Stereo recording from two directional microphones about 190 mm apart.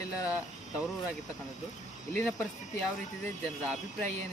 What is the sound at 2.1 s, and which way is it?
Speech, 10° left (ahead or behind).